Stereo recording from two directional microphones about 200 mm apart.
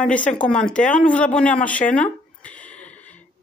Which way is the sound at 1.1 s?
5° left (ahead or behind).